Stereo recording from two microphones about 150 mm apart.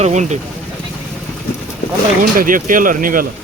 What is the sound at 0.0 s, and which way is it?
Speech, 50° right (ahead or behind).